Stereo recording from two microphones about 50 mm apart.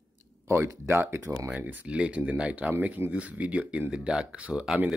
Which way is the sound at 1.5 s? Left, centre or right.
Right.